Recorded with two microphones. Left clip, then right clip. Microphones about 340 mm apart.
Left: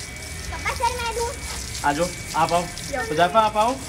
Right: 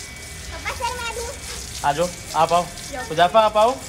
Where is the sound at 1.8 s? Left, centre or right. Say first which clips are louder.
Right 1 dB; right.